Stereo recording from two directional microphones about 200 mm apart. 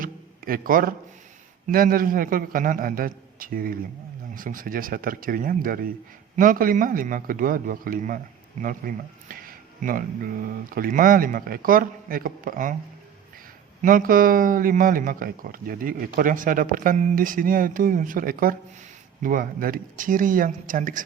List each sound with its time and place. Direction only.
0.0 s a sound: 45° right (ahead or behind)
1.6 s speech: 45° right (ahead or behind)
13.8 s speech: 45° right (ahead or behind)